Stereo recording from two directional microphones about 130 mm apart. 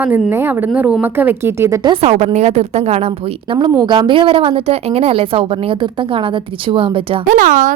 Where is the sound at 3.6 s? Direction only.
35° right (ahead or behind).